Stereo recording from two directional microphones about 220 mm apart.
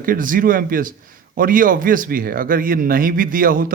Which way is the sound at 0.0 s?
40° right (ahead or behind).